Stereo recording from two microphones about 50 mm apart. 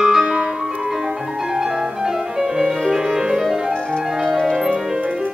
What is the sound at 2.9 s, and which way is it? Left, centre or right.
Music, centre.